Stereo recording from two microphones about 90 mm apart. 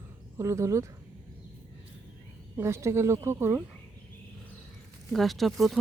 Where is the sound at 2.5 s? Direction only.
30° right (ahead or behind).